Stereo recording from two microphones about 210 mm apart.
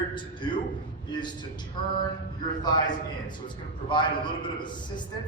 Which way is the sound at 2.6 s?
20° left (ahead or behind).